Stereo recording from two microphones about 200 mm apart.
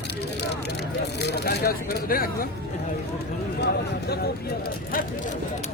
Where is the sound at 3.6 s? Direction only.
50° left (ahead or behind).